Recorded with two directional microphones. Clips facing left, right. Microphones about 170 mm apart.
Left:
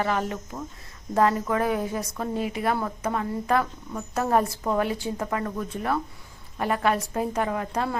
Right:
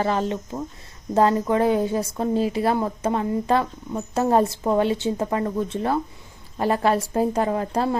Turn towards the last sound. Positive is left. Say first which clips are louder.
# right 5 dB
turn(degrees=-30)  # may be behind; listen again after turning